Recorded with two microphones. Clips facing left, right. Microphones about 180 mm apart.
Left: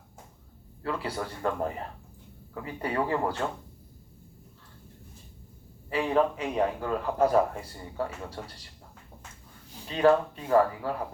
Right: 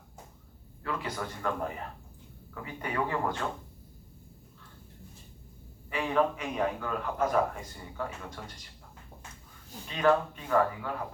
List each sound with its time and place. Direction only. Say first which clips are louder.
0.8 s a man's voice: left 3 dB; 30° left (ahead or behind)
5.9 s a man's voice: left 3 dB; 35° left (ahead or behind)
9.8 s a man's voice: left 4 dB; 35° left (ahead or behind)